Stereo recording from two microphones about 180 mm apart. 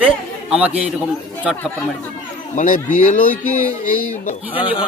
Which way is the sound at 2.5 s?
45° left (ahead or behind).